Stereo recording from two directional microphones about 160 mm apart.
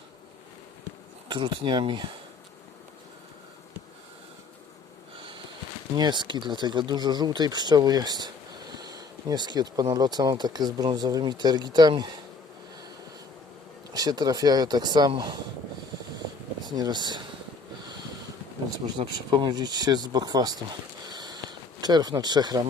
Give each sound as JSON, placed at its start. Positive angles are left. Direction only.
{"t": 1.3, "sound": "speech", "side_deg": -30}
{"t": 6.0, "sound": "speech", "side_deg": -30}
{"t": 13.9, "sound": "speech", "side_deg": -25}
{"t": 16.6, "sound": "speech", "side_deg": -25}
{"t": 18.9, "sound": "speech", "side_deg": -30}
{"t": 21.1, "sound": "a sound", "side_deg": -25}